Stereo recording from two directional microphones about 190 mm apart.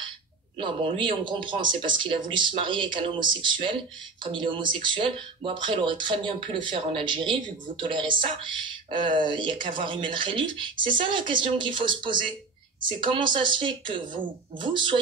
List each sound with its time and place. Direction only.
0.6 s speech: 25° right (ahead or behind)